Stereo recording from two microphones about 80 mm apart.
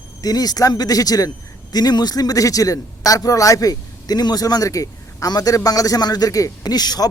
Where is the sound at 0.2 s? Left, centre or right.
Left.